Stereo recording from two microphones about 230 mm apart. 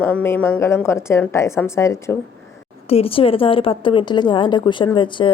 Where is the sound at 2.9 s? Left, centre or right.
Left.